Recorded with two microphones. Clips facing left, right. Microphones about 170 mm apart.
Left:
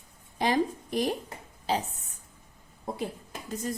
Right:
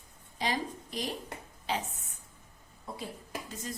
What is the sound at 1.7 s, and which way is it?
Speech, 35° left (ahead or behind).